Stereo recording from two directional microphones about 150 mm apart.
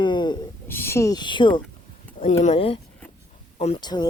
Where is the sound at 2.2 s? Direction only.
45° left (ahead or behind).